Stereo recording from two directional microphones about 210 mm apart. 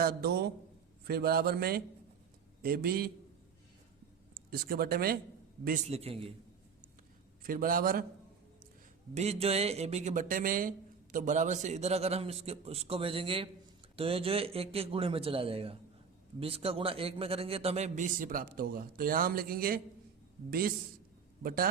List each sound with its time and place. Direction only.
0.0 s a man's voice: 50° right (ahead or behind)
4.4 s speech: 45° right (ahead or behind)
5.6 s a man's voice: 35° right (ahead or behind)
7.4 s a man's voice: 40° right (ahead or behind)
9.1 s a man's voice: 30° right (ahead or behind)